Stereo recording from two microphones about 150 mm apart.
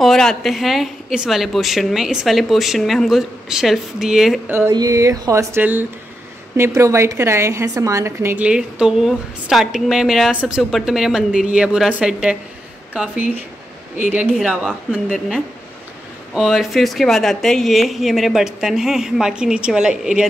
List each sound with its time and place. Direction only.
0.0 s a woman's voice: 5° left (ahead or behind)
4.5 s a woman's voice: 15° right (ahead or behind)
8.5 s a woman's voice: 5° right (ahead or behind)